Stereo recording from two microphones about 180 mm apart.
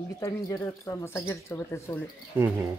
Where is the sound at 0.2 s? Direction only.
15° left (ahead or behind).